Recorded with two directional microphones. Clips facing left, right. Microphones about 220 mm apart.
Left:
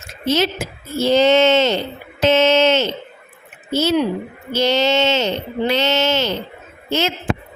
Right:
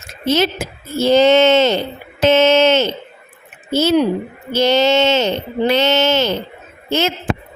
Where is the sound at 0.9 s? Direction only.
50° right (ahead or behind).